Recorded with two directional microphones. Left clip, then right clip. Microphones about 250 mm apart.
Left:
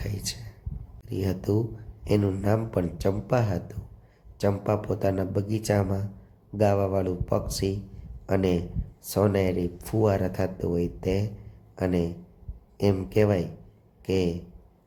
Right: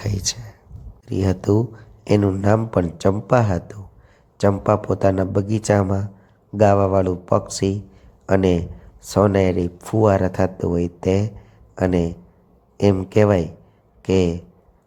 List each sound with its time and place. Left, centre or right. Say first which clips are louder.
0.0 s speech: right 9 dB; centre